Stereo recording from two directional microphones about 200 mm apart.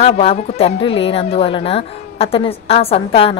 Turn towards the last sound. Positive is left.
turn(degrees=30)  # may be behind; listen again after turning